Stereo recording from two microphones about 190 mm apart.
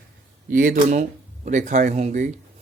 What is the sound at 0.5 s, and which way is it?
Speech, 45° right (ahead or behind).